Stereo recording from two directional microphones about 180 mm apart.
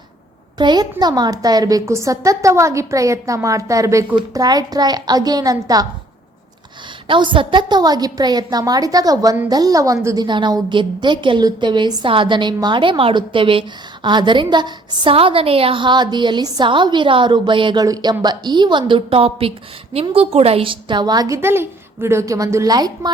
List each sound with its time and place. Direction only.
0.6 s a woman's voice: 25° right (ahead or behind)
7.1 s a woman's voice: 25° right (ahead or behind)